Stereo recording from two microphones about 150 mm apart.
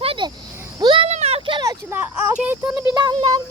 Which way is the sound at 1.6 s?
10° right (ahead or behind).